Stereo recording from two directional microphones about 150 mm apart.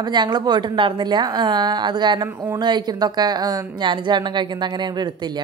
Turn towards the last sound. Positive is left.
turn(degrees=-30)  # may be behind; listen again after turning